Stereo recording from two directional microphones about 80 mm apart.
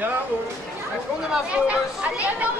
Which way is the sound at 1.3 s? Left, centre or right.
Centre.